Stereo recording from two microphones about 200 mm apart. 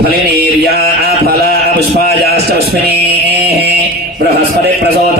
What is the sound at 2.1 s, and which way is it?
A man's voice, 55° right (ahead or behind).